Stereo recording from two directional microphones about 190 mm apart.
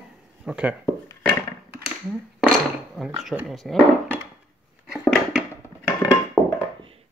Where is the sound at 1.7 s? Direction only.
5° right (ahead or behind).